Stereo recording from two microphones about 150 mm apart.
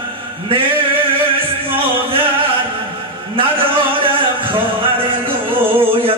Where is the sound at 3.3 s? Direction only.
35° right (ahead or behind).